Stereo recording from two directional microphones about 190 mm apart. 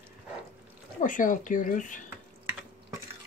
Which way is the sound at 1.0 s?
45° left (ahead or behind).